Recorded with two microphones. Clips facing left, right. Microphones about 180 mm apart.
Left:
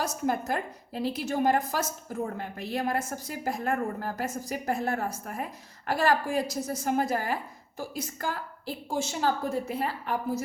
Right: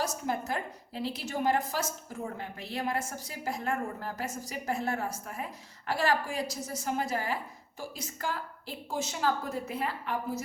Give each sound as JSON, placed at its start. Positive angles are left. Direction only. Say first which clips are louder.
{"t": 0.3, "sound": "a woman's voice", "louder": "left 4 dB", "side_deg": 50}
{"t": 8.6, "sound": "a woman's voice", "louder": "left 5 dB", "side_deg": 30}